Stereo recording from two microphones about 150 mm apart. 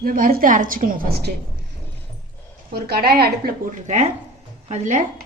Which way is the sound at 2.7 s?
90° right.